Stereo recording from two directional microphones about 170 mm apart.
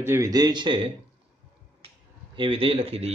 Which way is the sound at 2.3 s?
30° right (ahead or behind).